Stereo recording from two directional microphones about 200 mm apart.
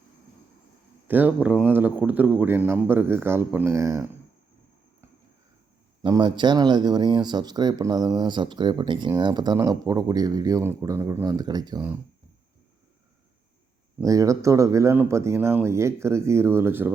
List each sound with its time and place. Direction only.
1.0 s speech: 10° right (ahead or behind)
6.0 s speech: 20° right (ahead or behind)
14.0 s speech: 15° right (ahead or behind)